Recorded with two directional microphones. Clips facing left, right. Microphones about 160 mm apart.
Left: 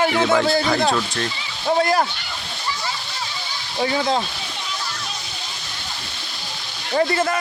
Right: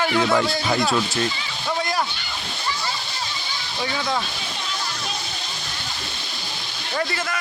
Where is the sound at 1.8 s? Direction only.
55° left (ahead or behind).